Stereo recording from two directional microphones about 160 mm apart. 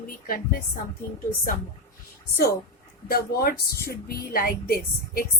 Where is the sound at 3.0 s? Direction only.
70° left (ahead or behind).